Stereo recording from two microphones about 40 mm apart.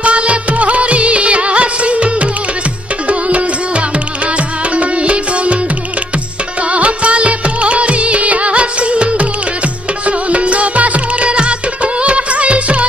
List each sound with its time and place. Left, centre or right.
0.0 s music of bollywood: right
3.1 s music: right
6.7 s music of bollywood: right
10.0 s music: right